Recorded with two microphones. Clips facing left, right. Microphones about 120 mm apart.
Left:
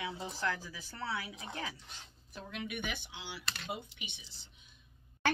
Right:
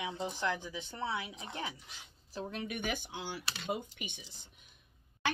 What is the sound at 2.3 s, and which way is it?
Speech, 35° right (ahead or behind).